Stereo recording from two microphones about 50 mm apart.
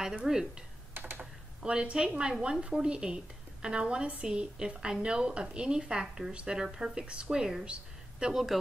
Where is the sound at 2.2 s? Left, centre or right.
Centre.